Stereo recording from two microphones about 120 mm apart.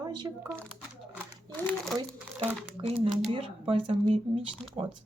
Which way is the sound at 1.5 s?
15° left (ahead or behind).